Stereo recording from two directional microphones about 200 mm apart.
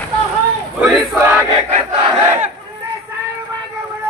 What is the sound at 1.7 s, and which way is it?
Battle cry, 35° right (ahead or behind).